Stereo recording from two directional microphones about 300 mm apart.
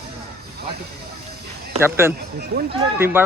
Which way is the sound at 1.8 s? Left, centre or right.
Centre.